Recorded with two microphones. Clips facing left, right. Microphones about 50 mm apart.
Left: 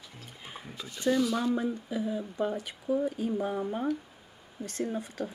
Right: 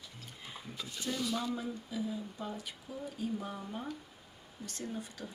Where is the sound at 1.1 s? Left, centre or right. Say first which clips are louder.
Left 9 dB; left.